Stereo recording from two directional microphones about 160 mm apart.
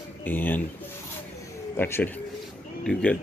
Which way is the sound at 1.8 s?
15° left (ahead or behind).